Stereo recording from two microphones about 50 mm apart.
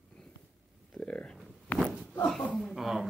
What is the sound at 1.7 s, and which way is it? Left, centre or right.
Walk, left.